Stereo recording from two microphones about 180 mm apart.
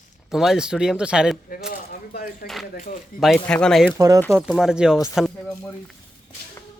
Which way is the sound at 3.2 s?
5° left (ahead or behind).